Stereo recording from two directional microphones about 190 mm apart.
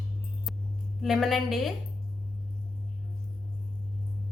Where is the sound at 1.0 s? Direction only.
Centre (ahead or behind).